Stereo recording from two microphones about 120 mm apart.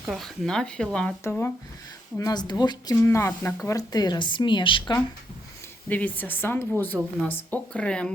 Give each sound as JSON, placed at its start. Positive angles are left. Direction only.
{"t": 0.0, "sound": "speech", "side_deg": 0}
{"t": 1.2, "sound": "speech", "side_deg": 20}
{"t": 2.1, "sound": "a woman's voice", "side_deg": 30}
{"t": 2.9, "sound": "a woman's voice", "side_deg": 25}
{"t": 5.9, "sound": "speech", "side_deg": 15}